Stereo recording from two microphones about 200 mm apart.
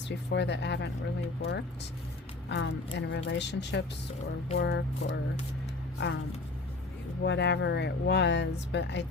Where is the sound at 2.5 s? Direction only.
60° left (ahead or behind).